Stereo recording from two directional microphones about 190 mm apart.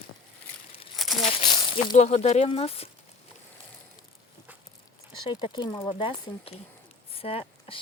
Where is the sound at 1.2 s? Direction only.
25° left (ahead or behind).